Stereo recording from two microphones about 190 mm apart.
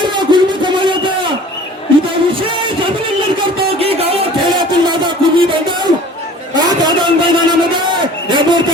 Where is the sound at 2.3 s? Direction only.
25° right (ahead or behind).